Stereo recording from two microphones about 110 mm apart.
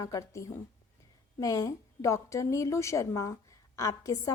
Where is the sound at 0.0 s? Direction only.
30° left (ahead or behind).